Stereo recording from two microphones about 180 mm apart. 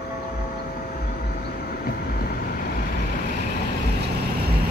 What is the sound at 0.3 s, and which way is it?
Vehicle, 55° left (ahead or behind).